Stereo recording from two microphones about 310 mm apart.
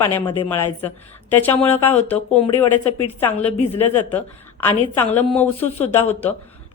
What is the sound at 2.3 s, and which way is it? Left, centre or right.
Speech, centre.